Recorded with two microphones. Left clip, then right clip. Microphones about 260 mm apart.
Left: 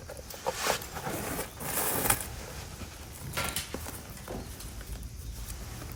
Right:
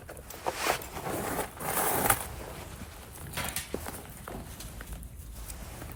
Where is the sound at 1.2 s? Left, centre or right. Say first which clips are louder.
Right 3 dB; centre.